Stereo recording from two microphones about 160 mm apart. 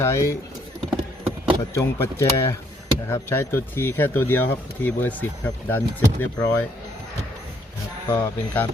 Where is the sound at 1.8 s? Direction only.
15° left (ahead or behind).